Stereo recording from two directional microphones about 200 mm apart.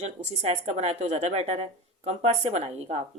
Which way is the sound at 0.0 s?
35° right (ahead or behind).